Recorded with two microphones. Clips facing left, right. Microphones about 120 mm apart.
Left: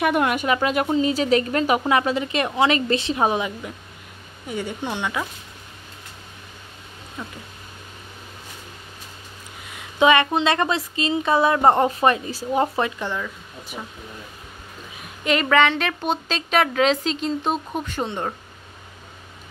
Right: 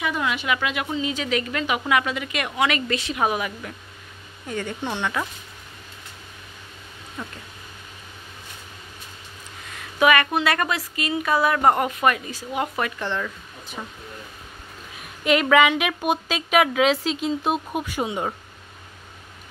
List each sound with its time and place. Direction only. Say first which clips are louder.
0.0 s speech: left 5 dB; 55° left (ahead or behind)
0.6 s speech: left 6 dB; 35° left (ahead or behind); by 5.2 s 15° left (ahead or behind)
9.7 s a woman's voice: left 2 dB; 20° left (ahead or behind)
13.0 s speech: even; 5° left (ahead or behind)
15.2 s a woman's voice: right 1 dB; 5° right (ahead or behind)